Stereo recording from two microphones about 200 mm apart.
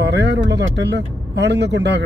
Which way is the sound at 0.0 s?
55° right (ahead or behind).